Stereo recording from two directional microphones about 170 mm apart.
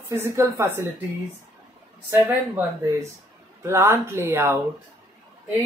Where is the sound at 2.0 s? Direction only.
15° right (ahead or behind).